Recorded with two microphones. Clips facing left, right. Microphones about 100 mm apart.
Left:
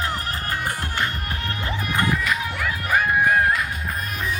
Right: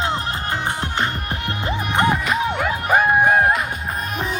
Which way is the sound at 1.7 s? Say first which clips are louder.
Right 5 dB; 25° right (ahead or behind).